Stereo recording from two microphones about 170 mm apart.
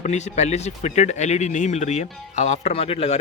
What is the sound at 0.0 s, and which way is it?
Speech, 45° left (ahead or behind).